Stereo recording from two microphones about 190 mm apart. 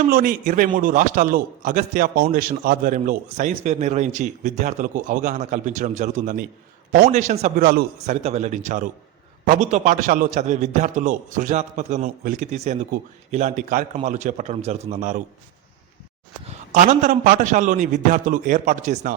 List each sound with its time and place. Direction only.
0.1 s a man's voice: 50° right (ahead or behind)
16.7 s a man's voice: 40° right (ahead or behind)